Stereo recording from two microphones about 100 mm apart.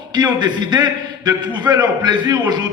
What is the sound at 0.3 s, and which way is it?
A man's voice, 45° right (ahead or behind).